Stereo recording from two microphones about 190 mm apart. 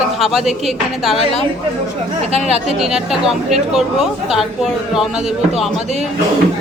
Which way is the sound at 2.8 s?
Centre (ahead or behind).